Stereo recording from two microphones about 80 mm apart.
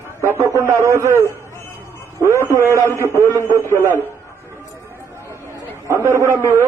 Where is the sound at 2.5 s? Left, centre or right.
Right.